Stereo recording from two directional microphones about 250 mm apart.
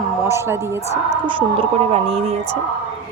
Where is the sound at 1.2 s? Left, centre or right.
Right.